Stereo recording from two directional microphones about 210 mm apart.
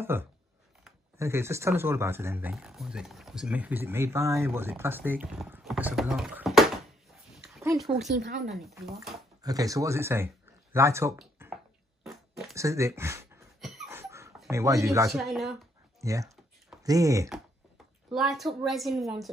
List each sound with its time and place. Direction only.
0.0 s a woman's voice: 10° right (ahead or behind)
9.4 s speech: 15° right (ahead or behind)
11.1 s a sound: 5° right (ahead or behind)
12.5 s speech: 15° right (ahead or behind)
13.6 s a sound: centre (ahead or behind)
13.8 s a sound: 15° right (ahead or behind)
14.5 s speech: 15° right (ahead or behind)
15.1 s a woman's voice: centre (ahead or behind)
16.0 s speech: 15° right (ahead or behind)
18.1 s a woman's voice: centre (ahead or behind)